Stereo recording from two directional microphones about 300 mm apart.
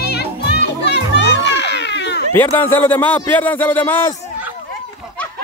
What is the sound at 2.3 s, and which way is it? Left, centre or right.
A man's voice, centre.